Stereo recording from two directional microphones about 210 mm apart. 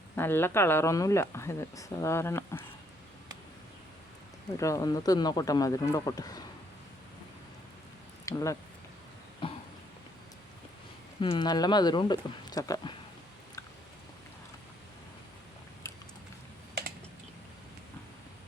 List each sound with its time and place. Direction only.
0.2 s speech: 10° left (ahead or behind)
4.5 s speech: 15° left (ahead or behind)
8.2 s speech: 15° left (ahead or behind)
9.4 s a sound: 25° left (ahead or behind)
11.2 s speech: 25° left (ahead or behind)